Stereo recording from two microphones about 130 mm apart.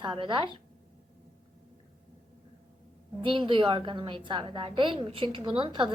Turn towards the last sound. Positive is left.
turn(degrees=-40)  # may be behind; listen again after turning